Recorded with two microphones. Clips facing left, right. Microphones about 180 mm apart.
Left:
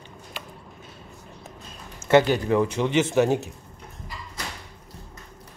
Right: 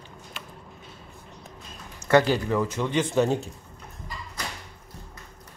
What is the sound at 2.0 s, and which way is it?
Speech, 20° left (ahead or behind).